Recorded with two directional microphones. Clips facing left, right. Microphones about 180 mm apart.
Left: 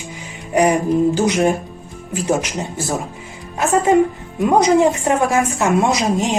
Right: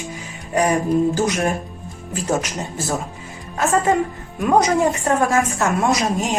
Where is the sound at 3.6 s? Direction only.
15° left (ahead or behind).